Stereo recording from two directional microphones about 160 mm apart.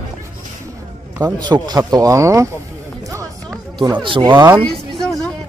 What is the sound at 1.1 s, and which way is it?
Speech, 25° right (ahead or behind).